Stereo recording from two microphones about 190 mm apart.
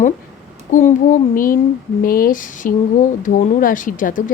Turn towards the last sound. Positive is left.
turn(degrees=45)  # may be behind; listen again after turning